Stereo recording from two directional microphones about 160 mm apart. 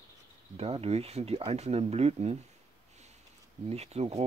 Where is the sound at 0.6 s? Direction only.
40° right (ahead or behind).